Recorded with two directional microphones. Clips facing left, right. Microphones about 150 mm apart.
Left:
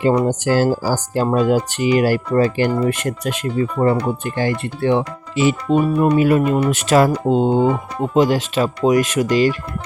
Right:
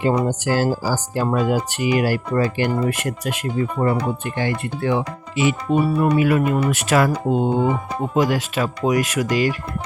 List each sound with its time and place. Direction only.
0.0 s speech: 35° left (ahead or behind)